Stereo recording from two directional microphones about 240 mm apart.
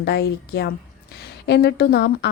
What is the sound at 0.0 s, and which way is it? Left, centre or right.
A woman's voice, left.